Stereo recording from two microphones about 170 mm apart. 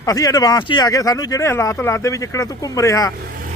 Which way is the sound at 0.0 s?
20° left (ahead or behind).